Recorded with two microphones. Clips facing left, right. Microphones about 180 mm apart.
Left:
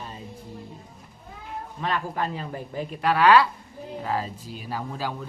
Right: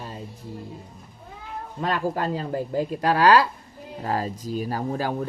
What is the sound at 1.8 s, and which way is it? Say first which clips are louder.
A woman's voice: right 3 dB; 40° right (ahead or behind).